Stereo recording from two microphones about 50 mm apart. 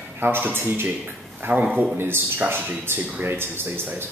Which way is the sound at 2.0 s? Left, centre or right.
Right.